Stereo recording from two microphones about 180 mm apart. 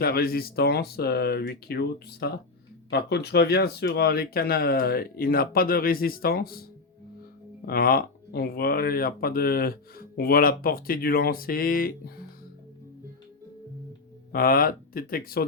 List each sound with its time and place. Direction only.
0.0 s speech: 55° left (ahead or behind)
14.3 s speech: 55° left (ahead or behind)